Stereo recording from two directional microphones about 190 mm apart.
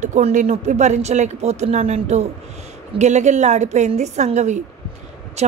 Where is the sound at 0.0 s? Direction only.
40° right (ahead or behind).